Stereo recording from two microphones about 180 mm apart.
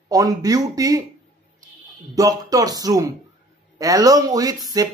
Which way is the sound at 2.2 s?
20° right (ahead or behind).